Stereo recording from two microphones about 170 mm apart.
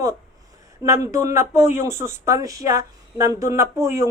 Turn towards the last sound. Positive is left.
turn(degrees=-15)  # may be behind; listen again after turning